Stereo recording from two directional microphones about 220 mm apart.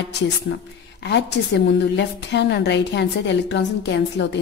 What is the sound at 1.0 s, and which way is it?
A woman's voice, 50° left (ahead or behind).